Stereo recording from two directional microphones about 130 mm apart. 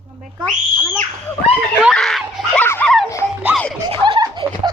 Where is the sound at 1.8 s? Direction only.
Centre (ahead or behind).